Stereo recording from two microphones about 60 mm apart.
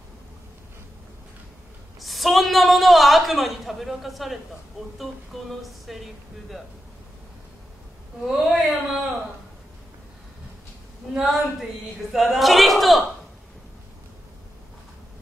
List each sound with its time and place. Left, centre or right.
2.0 s a woman's voice: centre
8.2 s a woman's voice: centre
11.1 s a woman's voice: centre